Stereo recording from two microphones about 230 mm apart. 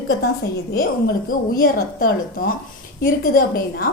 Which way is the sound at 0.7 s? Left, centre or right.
Left.